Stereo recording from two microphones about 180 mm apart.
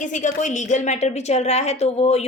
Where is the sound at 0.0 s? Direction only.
45° left (ahead or behind).